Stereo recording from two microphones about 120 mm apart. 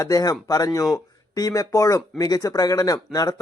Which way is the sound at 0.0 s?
30° left (ahead or behind).